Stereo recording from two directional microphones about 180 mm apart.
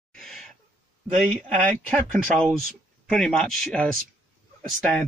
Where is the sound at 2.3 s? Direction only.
Centre (ahead or behind).